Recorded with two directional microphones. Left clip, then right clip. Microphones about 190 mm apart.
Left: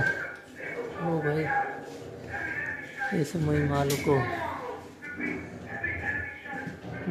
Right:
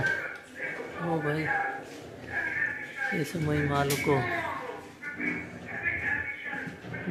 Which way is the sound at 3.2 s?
10° left (ahead or behind).